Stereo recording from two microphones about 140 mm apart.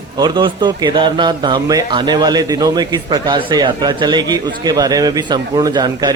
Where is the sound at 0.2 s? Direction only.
35° right (ahead or behind).